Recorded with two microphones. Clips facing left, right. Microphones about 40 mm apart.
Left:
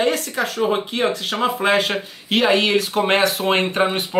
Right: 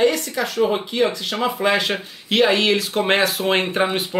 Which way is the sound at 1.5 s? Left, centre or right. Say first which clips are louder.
Left 1 dB; centre.